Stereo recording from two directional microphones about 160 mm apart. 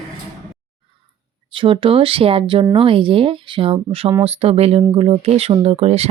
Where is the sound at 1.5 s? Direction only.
30° right (ahead or behind).